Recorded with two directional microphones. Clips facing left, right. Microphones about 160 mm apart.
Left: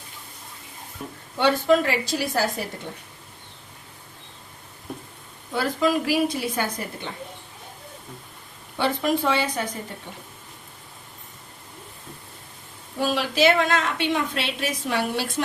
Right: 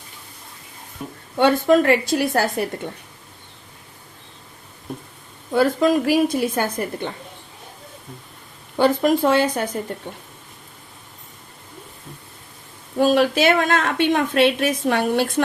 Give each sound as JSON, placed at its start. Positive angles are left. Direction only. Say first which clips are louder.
{"t": 1.0, "sound": "speech", "louder": "right 3 dB", "side_deg": -5}
{"t": 1.4, "sound": "a woman's voice", "louder": "right 4 dB", "side_deg": -50}
{"t": 5.5, "sound": "a woman's voice", "louder": "right 6 dB", "side_deg": -50}
{"t": 8.8, "sound": "a woman's voice", "louder": "right 6 dB", "side_deg": -45}
{"t": 13.0, "sound": "a woman's voice", "louder": "right 5 dB", "side_deg": -55}